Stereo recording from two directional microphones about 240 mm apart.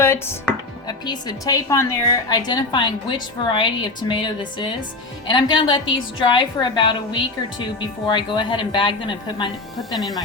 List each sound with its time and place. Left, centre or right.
0.0 s music: centre
0.9 s a woman's voice: centre
9.9 s speech: centre